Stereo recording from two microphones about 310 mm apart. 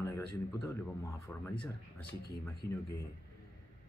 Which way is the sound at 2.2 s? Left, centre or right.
Left.